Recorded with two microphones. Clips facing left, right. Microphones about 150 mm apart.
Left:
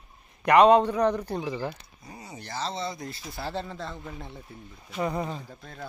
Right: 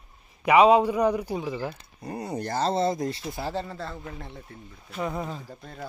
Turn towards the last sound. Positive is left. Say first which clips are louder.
# right 2 dB
turn(degrees=-5)  # may be behind; listen again after turning